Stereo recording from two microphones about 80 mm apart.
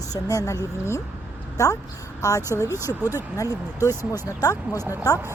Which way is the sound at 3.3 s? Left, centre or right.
Left.